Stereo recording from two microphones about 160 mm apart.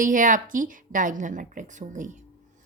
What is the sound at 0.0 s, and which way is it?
Speech, 55° right (ahead or behind).